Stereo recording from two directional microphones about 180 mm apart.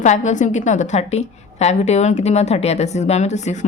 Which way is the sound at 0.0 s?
40° left (ahead or behind).